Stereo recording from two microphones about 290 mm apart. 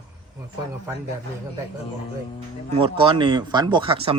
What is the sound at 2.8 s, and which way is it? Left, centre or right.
Speech, centre.